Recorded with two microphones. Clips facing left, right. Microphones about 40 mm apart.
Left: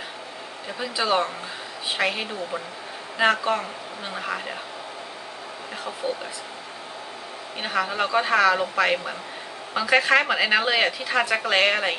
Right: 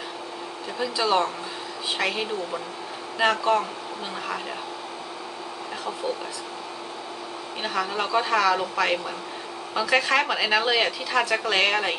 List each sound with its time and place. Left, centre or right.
0.7 s a woman's voice: centre
7.6 s a woman's voice: left